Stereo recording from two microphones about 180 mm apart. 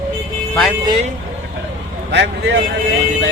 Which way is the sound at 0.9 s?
35° right (ahead or behind).